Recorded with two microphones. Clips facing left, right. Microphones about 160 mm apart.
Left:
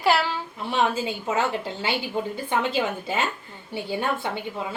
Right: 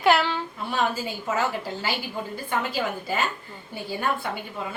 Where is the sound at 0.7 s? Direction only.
20° left (ahead or behind).